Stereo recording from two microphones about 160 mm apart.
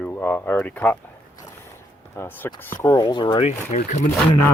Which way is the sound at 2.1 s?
15° left (ahead or behind).